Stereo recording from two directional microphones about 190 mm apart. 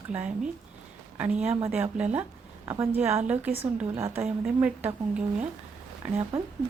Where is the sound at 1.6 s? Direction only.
10° right (ahead or behind).